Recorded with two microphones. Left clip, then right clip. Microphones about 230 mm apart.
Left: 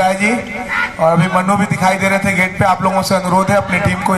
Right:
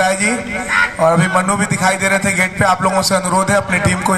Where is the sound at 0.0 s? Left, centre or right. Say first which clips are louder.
Left 1 dB; right.